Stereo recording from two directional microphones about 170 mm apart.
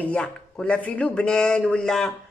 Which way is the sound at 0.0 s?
5° left (ahead or behind).